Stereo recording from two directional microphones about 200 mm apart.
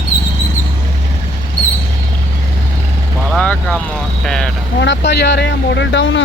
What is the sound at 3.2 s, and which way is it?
Speech, 5° left (ahead or behind).